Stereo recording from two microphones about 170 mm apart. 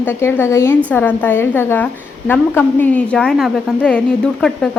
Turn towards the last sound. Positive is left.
turn(degrees=5)  # may be behind; listen again after turning